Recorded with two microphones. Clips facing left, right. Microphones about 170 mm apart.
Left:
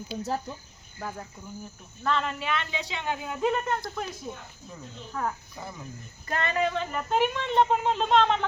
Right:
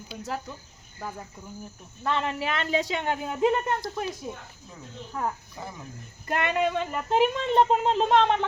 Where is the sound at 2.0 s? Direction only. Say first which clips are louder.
Even; 20° right (ahead or behind).